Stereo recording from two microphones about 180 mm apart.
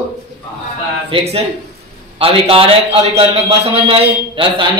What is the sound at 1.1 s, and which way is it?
A man's voice, 35° right (ahead or behind).